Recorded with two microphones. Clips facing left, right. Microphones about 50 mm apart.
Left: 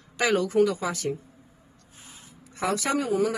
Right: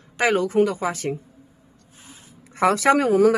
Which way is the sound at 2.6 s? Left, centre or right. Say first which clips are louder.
Right 9 dB; right.